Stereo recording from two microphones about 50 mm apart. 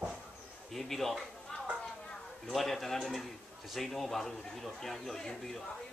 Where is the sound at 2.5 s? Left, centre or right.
Centre.